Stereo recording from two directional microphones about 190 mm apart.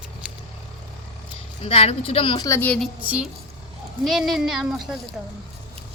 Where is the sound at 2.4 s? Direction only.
10° left (ahead or behind).